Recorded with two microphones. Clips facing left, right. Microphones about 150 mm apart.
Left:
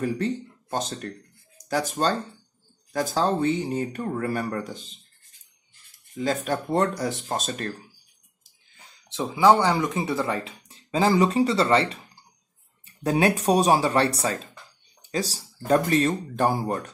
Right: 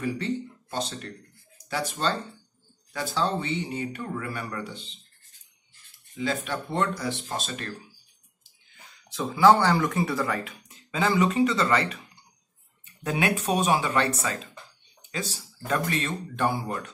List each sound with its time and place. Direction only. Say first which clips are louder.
0.0 s speech: left 3 dB; 45° left (ahead or behind)
6.1 s speech: left 4 dB; 40° left (ahead or behind)
9.1 s speech: even; 20° left (ahead or behind); by 16.9 s 40° left (ahead or behind)